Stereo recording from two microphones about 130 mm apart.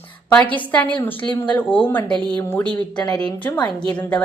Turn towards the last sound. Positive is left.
turn(degrees=10)  # may be behind; listen again after turning